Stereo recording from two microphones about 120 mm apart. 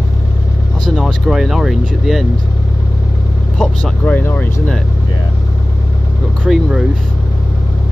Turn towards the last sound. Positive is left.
turn(degrees=-5)  # may be behind; listen again after turning